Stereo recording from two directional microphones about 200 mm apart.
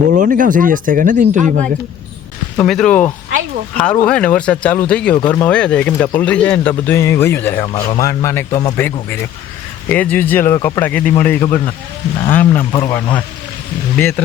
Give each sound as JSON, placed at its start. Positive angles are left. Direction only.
{"t": 0.2, "sound": "speech", "side_deg": -40}
{"t": 2.6, "sound": "speech", "side_deg": 5}
{"t": 8.7, "sound": "speech", "side_deg": 10}